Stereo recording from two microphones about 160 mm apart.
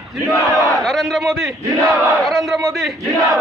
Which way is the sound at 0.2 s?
20° left (ahead or behind).